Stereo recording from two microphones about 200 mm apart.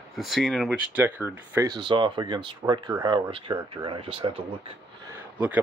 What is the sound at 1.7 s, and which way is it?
Speech, 25° right (ahead or behind).